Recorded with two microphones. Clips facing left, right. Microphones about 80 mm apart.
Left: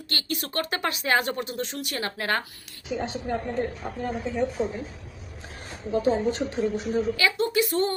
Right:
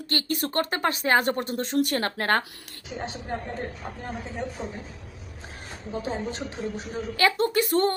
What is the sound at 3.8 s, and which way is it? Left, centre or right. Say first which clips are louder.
A woman's voice: left 5 dB; left.